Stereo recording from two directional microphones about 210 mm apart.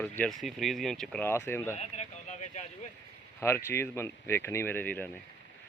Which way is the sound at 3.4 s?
10° left (ahead or behind).